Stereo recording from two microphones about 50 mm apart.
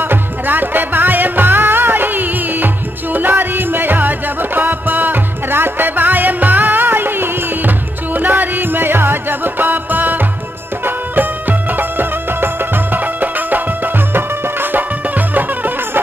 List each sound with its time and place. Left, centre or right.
0.0 s music: right
10.9 s music of bollywood: right